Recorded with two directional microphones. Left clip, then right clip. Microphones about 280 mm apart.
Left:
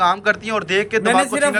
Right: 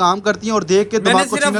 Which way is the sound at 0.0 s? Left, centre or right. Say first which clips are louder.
Right 1 dB; centre.